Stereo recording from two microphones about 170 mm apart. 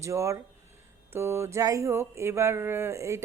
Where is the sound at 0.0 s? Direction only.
15° right (ahead or behind).